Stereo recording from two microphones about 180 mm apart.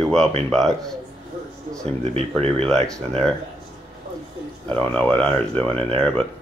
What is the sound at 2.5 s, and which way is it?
Speech, 5° left (ahead or behind).